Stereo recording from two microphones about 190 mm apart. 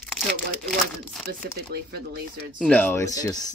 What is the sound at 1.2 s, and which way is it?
Speech, 55° right (ahead or behind).